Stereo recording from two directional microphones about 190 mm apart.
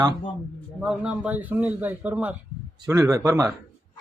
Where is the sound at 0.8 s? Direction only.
5° right (ahead or behind).